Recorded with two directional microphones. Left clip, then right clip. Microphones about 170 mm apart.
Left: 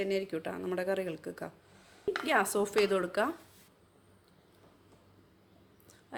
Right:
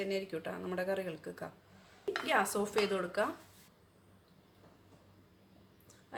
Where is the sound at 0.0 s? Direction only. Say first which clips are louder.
Left 4 dB; 45° left (ahead or behind); by 3.2 s 65° left (ahead or behind).